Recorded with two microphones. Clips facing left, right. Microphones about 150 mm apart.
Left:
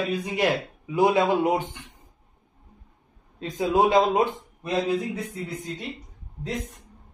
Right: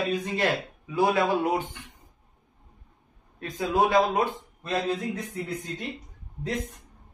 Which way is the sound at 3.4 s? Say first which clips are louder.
Left 3 dB; 20° left (ahead or behind).